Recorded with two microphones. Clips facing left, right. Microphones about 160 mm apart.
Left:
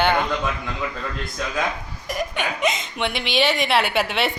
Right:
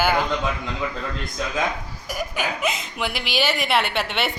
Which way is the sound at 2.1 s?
Centre (ahead or behind).